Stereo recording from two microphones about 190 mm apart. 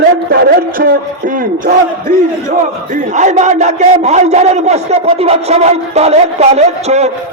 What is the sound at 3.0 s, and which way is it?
A man's voice, 40° right (ahead or behind).